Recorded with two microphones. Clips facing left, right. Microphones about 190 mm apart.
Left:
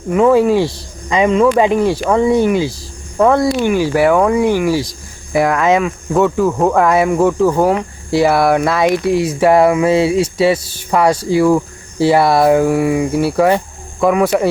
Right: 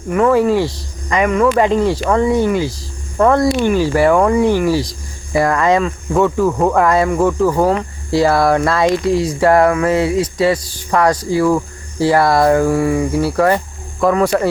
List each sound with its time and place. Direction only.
0.1 s speech: 15° left (ahead or behind)
3.2 s speech: 5° left (ahead or behind)
9.6 s a sound: 15° left (ahead or behind)
10.9 s speech: 10° left (ahead or behind)
11.2 s a sound: 25° left (ahead or behind)
12.4 s speech: 10° left (ahead or behind)